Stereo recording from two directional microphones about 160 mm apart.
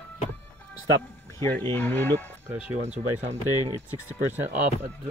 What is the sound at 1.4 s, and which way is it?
Speech, 15° left (ahead or behind).